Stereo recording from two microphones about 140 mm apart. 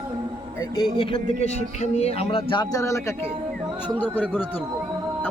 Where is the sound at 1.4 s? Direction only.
50° left (ahead or behind); by 2.8 s 35° left (ahead or behind).